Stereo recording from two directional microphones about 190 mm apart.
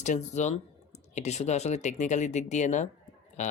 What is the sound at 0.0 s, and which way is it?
Speech, 40° left (ahead or behind).